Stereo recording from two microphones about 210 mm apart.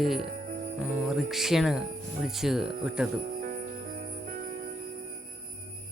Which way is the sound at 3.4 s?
40° right (ahead or behind).